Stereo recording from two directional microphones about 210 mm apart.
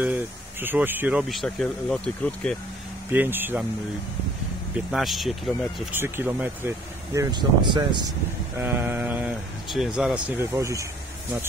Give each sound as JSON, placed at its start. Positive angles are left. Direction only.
{"t": 0.0, "sound": "speech", "side_deg": -10}
{"t": 3.1, "sound": "speech", "side_deg": -10}
{"t": 4.9, "sound": "speech", "side_deg": 0}
{"t": 8.5, "sound": "speech", "side_deg": -10}